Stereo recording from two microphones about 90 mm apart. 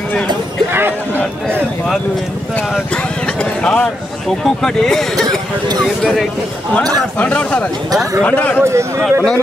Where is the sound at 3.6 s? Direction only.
10° left (ahead or behind).